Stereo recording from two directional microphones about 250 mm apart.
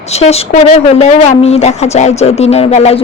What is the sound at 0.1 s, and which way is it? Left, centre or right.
A woman's voice, left.